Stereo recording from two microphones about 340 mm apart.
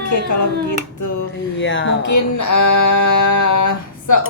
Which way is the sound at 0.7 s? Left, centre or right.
Left.